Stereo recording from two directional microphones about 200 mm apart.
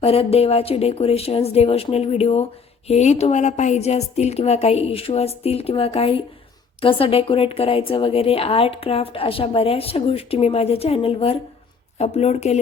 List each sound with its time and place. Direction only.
0.0 s a woman's voice: 30° left (ahead or behind)